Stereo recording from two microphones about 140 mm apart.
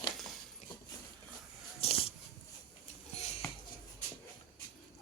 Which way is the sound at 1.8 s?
45° left (ahead or behind).